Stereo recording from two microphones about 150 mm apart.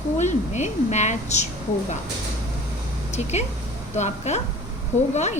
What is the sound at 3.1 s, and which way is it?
A woman's voice, 45° left (ahead or behind).